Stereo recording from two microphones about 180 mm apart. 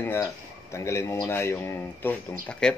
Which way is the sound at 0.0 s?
10° left (ahead or behind).